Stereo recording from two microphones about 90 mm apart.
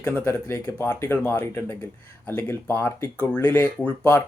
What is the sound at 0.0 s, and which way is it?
Speech, 25° left (ahead or behind).